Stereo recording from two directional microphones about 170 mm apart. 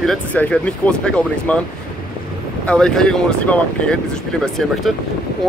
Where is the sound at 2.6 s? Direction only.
5° left (ahead or behind).